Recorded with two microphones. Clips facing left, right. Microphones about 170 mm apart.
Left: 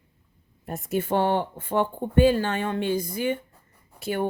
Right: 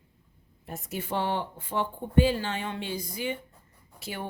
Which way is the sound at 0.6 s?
50° left (ahead or behind).